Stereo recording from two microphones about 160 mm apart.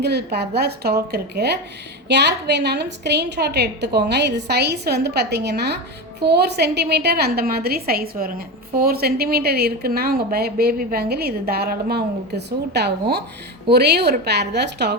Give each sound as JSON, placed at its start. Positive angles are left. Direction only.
{"t": 0.0, "sound": "a woman's voice", "side_deg": -90}